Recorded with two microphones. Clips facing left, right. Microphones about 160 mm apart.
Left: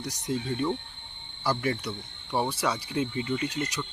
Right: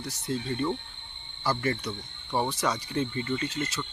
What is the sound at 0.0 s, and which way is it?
Speech, 10° left (ahead or behind).